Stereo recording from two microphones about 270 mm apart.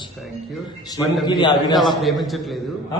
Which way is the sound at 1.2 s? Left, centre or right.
Centre.